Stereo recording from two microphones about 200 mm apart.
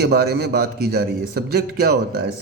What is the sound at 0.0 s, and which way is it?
A man's voice, 50° right (ahead or behind).